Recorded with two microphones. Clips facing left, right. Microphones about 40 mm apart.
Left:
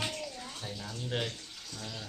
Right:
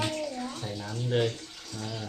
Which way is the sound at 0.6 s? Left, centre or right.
Centre.